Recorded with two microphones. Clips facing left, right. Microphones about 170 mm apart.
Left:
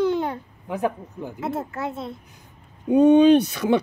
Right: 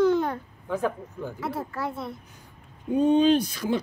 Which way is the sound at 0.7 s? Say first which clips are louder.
Left 2 dB; 15° left (ahead or behind).